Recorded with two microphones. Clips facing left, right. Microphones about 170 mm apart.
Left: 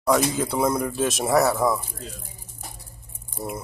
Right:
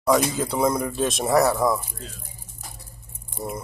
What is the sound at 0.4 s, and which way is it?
Speech, centre (ahead or behind).